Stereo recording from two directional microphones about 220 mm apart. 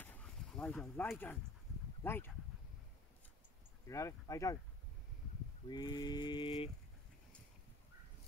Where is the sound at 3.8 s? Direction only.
15° left (ahead or behind).